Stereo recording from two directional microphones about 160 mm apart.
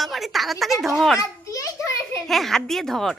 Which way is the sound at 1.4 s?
20° left (ahead or behind).